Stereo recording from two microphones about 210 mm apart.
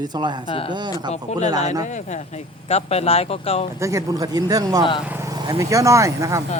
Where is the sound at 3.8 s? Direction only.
15° right (ahead or behind).